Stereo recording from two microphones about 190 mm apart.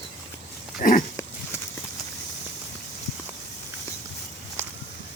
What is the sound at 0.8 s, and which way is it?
Dog, 45° left (ahead or behind).